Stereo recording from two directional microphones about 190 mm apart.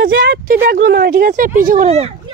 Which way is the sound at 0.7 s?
60° right (ahead or behind).